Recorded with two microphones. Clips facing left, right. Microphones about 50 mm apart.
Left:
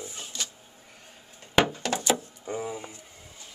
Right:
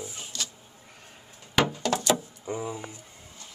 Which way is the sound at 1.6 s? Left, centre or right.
Left.